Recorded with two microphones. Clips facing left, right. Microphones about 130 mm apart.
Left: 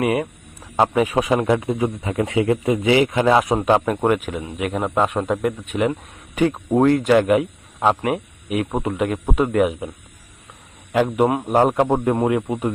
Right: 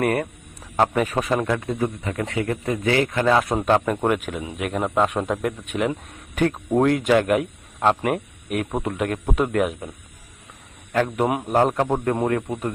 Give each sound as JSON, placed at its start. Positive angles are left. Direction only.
{"t": 0.0, "sound": "a man's voice", "side_deg": 5}
{"t": 1.5, "sound": "a man's voice", "side_deg": 20}
{"t": 3.8, "sound": "a man's voice", "side_deg": 0}
{"t": 6.9, "sound": "a man's voice", "side_deg": 0}
{"t": 10.9, "sound": "speech", "side_deg": 10}
{"t": 11.3, "sound": "a man's voice", "side_deg": -5}
{"t": 11.5, "sound": "speech", "side_deg": 10}